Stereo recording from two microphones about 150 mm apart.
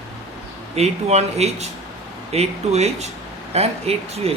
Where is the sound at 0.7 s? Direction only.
45° right (ahead or behind).